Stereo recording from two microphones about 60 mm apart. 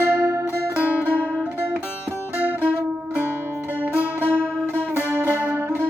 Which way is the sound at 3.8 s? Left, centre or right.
Right.